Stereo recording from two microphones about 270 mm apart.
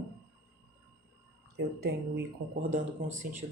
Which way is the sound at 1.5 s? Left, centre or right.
Right.